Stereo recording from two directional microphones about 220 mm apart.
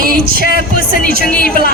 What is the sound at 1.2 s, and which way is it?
Speech, 40° left (ahead or behind).